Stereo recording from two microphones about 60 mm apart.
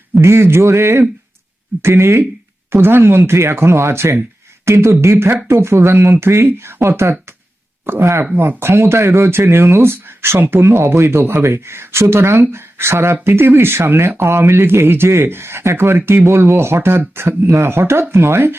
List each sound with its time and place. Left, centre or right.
0.2 s speech: right
2.7 s speech: right